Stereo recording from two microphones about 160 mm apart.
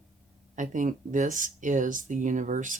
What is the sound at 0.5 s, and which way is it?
Speech, 50° right (ahead or behind).